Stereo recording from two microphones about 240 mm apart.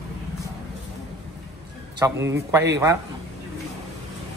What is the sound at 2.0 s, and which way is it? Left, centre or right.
Speech, centre.